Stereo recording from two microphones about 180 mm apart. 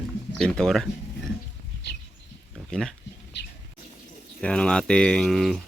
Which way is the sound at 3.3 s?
70° left (ahead or behind).